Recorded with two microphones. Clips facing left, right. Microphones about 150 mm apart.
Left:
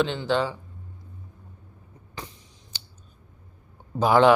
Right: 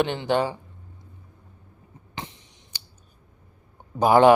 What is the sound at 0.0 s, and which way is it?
Speech, 55° right (ahead or behind).